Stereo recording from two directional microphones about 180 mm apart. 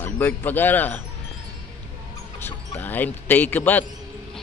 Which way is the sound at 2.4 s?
10° left (ahead or behind).